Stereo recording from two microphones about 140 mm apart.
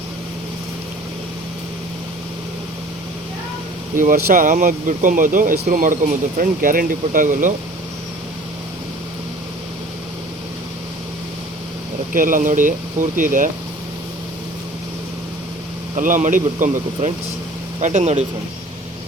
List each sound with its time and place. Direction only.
3.9 s speech: 75° right (ahead or behind)
12.1 s speech: 75° right (ahead or behind)
16.0 s speech: 70° right (ahead or behind); by 18.3 s 55° right (ahead or behind)